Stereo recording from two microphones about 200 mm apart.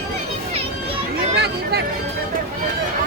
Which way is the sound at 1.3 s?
55° right (ahead or behind).